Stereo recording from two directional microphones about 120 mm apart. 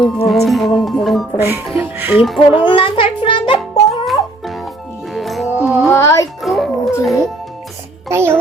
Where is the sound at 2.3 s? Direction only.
Centre (ahead or behind).